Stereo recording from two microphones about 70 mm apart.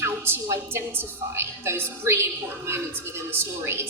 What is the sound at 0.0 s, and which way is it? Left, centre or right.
A woman's voice, right.